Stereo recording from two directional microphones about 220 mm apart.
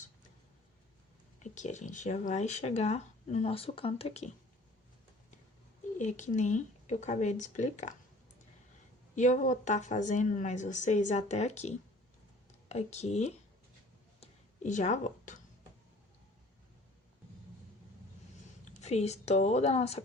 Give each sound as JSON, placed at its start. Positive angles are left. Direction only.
{"t": 1.4, "sound": "speech", "side_deg": 35}
{"t": 6.0, "sound": "speech", "side_deg": 35}
{"t": 9.1, "sound": "speech", "side_deg": 35}
{"t": 14.2, "sound": "a sound", "side_deg": 35}
{"t": 18.8, "sound": "a woman's voice", "side_deg": 30}